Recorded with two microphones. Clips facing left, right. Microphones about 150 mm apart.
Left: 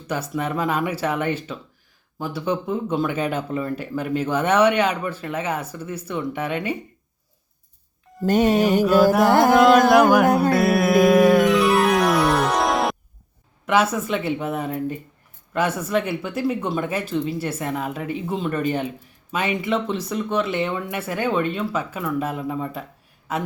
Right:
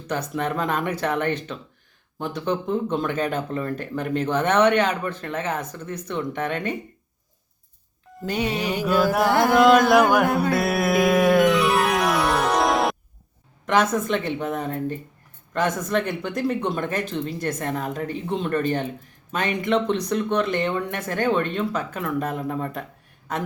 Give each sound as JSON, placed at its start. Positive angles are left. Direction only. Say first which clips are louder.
{"t": 0.1, "sound": "speech", "louder": "even", "side_deg": 10}
{"t": 8.2, "sound": "speech", "louder": "left 8 dB", "side_deg": 45}
{"t": 8.8, "sound": "speech", "louder": "left 1 dB", "side_deg": 0}
{"t": 10.3, "sound": "music", "louder": "left 4 dB", "side_deg": 0}
{"t": 13.7, "sound": "speech", "louder": "left 1 dB", "side_deg": 10}